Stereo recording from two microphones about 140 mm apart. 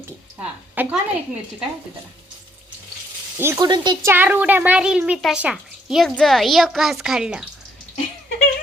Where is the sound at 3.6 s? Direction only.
35° right (ahead or behind).